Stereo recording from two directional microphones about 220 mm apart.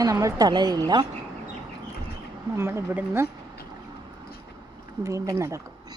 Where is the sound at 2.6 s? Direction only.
10° right (ahead or behind).